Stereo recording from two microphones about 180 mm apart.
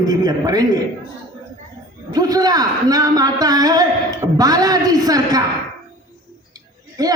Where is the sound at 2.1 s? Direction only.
20° right (ahead or behind).